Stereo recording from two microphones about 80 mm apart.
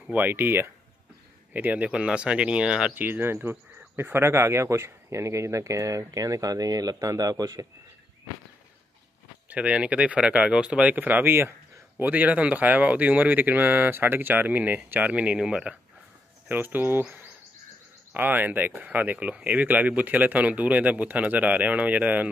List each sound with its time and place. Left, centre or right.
0.1 s speech: right
2.9 s speech: right
9.5 s speech: centre; by 11.5 s right
12.0 s speech: centre
16.4 s speech: right
18.1 s speech: right